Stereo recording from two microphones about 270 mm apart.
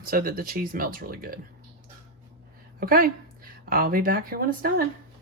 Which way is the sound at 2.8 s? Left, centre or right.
Right.